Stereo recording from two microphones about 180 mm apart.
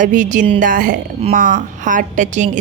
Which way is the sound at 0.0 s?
45° right (ahead or behind).